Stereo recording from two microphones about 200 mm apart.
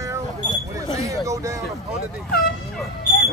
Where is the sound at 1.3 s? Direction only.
15° right (ahead or behind).